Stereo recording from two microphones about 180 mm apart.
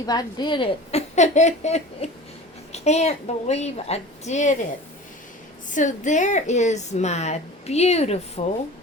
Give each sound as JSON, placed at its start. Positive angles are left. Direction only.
{"t": 0.0, "sound": "a woman's voice", "side_deg": 20}
{"t": 5.7, "sound": "a woman's voice", "side_deg": 45}